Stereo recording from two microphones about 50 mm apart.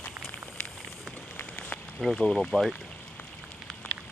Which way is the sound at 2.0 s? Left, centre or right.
Centre.